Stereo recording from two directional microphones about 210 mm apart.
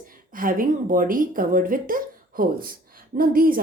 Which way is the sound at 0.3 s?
40° right (ahead or behind).